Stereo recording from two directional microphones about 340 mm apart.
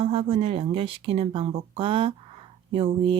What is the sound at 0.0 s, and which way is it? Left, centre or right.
Speech, centre.